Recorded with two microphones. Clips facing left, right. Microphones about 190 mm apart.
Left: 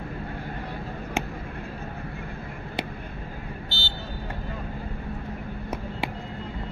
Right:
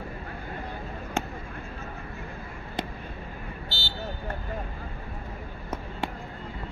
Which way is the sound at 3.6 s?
25° left (ahead or behind).